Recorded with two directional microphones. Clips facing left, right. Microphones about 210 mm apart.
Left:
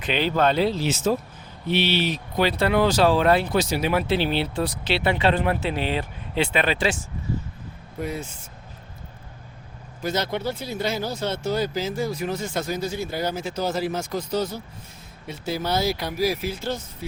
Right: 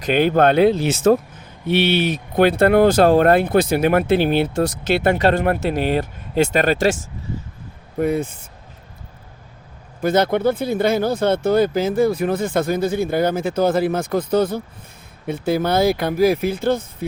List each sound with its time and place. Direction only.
0.0 s speech: 50° right (ahead or behind)
7.9 s speech: 55° right (ahead or behind)
10.0 s speech: 55° right (ahead or behind)